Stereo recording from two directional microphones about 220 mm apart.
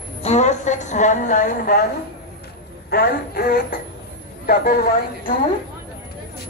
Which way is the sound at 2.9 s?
45° left (ahead or behind).